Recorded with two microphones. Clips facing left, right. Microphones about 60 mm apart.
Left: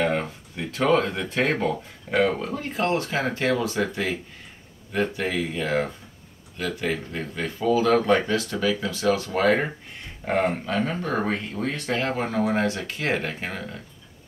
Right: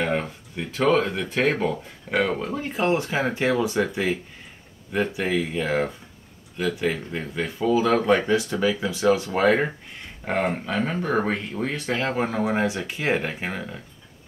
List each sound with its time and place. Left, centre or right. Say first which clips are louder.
0.0 s speech: left 1 dB; centre